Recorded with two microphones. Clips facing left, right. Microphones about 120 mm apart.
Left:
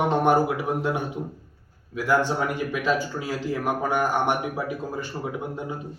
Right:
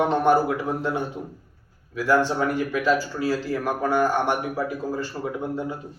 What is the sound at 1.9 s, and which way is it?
Speech, 15° left (ahead or behind).